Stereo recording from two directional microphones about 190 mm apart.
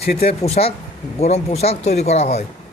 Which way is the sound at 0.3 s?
35° left (ahead or behind).